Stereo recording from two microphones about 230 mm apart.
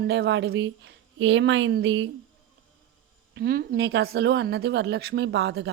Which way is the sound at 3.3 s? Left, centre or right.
Right.